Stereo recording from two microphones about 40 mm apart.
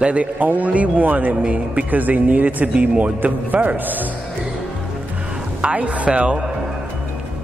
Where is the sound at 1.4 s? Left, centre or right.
Right.